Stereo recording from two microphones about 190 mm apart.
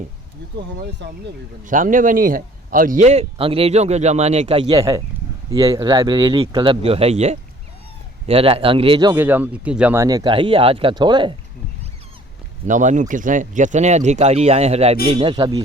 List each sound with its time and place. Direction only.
1.0 s speech: 70° right (ahead or behind)
1.6 s a man's voice: 45° right (ahead or behind)
4.7 s speech: 15° right (ahead or behind)
9.1 s speech: 10° right (ahead or behind)
12.6 s a man's voice: 40° right (ahead or behind); by 15.6 s 25° right (ahead or behind)